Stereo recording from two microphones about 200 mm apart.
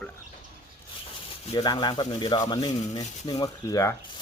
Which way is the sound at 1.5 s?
20° left (ahead or behind).